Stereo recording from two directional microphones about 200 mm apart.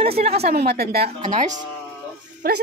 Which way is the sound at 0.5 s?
50° right (ahead or behind).